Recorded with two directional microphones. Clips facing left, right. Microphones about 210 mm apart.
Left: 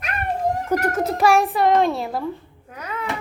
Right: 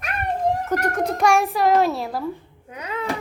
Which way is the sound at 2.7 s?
25° right (ahead or behind).